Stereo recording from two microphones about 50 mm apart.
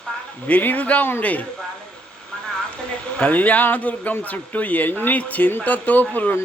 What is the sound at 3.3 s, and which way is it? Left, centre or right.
A man's voice, left.